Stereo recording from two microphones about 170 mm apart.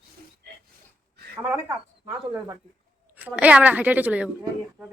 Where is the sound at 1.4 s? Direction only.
10° right (ahead or behind).